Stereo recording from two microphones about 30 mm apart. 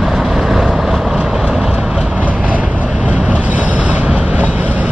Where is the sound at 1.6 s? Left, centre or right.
Right.